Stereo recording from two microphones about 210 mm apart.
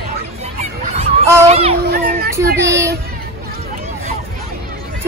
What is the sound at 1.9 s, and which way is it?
Speech, 45° right (ahead or behind).